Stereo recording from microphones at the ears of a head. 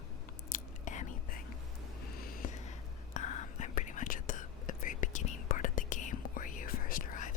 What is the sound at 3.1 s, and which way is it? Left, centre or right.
Whispering, left.